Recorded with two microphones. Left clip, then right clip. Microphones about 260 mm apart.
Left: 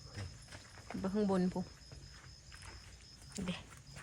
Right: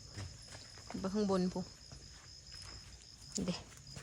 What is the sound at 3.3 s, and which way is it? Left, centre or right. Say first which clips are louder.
Dog: right 3 dB; centre.